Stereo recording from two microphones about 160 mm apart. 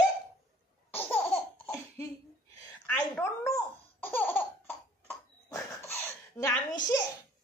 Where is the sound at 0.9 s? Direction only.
15° left (ahead or behind).